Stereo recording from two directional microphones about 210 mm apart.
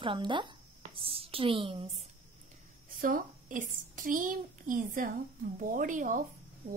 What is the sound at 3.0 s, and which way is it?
A child's voice, 40° right (ahead or behind).